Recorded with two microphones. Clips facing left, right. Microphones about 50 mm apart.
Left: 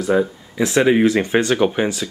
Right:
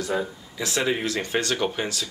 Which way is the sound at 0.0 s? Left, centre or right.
Left.